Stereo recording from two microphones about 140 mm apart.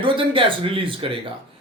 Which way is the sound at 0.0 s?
35° right (ahead or behind).